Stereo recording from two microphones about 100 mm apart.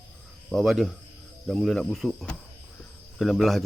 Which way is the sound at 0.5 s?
Centre (ahead or behind).